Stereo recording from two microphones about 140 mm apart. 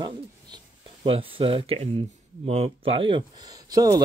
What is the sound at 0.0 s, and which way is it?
Speech, 35° right (ahead or behind).